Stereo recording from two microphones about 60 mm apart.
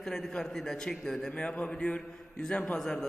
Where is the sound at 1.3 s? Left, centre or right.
Centre.